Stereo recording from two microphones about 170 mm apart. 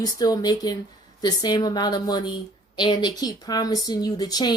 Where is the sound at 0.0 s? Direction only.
20° left (ahead or behind).